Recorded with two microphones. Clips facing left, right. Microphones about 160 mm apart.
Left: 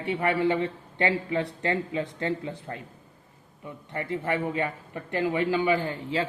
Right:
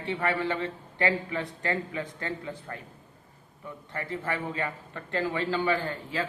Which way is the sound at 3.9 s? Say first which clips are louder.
Left 4 dB; 20° left (ahead or behind).